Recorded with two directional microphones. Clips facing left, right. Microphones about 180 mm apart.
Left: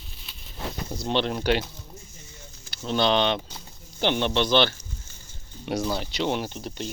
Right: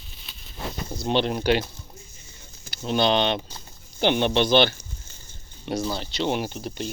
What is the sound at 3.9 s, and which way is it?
Speech, 15° right (ahead or behind).